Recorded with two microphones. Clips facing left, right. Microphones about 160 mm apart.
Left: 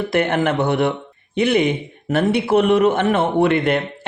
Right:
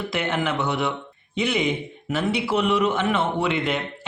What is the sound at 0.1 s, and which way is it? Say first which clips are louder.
A man's voice: left 7 dB; 55° left (ahead or behind).